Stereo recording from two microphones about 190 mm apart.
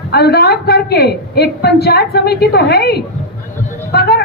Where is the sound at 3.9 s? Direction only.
55° left (ahead or behind).